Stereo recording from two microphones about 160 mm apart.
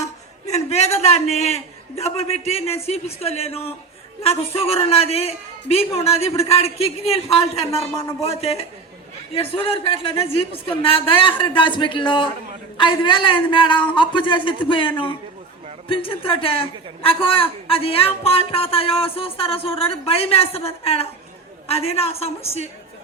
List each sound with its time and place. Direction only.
0.4 s a woman's voice: 45° left (ahead or behind)